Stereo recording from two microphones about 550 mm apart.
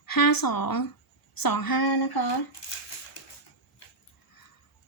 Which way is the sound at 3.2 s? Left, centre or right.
Left.